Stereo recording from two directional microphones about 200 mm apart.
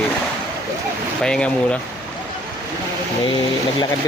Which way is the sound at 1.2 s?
5° left (ahead or behind).